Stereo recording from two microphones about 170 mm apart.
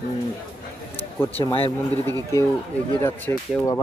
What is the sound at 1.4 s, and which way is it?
Speech, 30° left (ahead or behind).